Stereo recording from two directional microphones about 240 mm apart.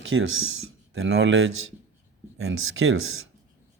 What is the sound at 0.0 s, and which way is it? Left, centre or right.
Speech, right.